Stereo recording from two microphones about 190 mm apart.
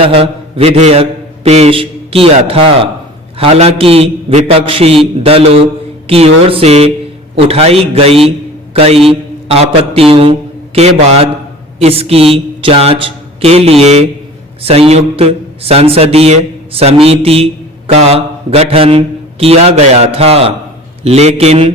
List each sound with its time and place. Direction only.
0.0 s a man's voice: 30° right (ahead or behind)